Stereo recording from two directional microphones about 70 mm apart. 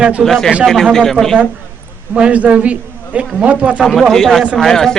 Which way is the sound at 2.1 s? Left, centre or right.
Centre.